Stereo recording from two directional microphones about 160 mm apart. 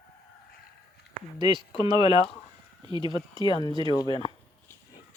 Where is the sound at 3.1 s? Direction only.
30° left (ahead or behind).